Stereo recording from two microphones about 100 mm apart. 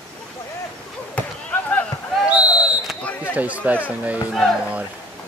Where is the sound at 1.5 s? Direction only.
20° left (ahead or behind).